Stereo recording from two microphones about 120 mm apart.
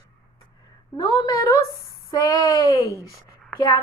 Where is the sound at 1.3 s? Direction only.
25° left (ahead or behind).